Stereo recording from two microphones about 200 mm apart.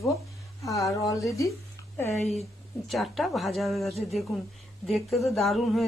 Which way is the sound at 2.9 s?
Centre (ahead or behind).